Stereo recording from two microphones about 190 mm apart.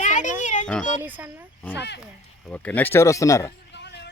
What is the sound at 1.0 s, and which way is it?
Speech, 10° right (ahead or behind).